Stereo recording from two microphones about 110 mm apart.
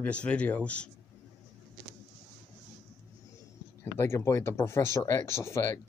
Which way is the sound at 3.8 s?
25° left (ahead or behind).